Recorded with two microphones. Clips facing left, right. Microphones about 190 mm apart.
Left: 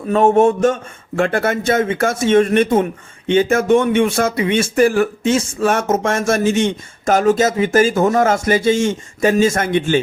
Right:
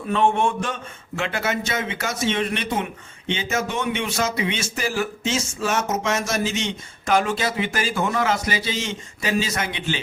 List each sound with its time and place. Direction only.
0.1 s a man's voice: 40° left (ahead or behind)